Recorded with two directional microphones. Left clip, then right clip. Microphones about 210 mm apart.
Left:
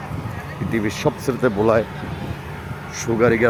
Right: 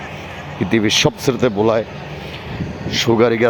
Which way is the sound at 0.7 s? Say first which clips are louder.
Right 7 dB; 20° right (ahead or behind).